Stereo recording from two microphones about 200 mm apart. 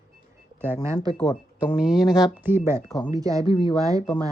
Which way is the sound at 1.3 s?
Centre (ahead or behind).